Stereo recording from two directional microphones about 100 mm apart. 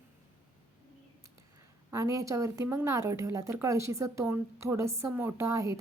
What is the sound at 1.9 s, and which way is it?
A woman's voice, 30° right (ahead or behind).